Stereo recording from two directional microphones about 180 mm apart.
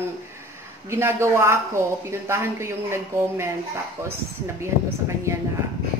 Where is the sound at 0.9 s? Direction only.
15° right (ahead or behind).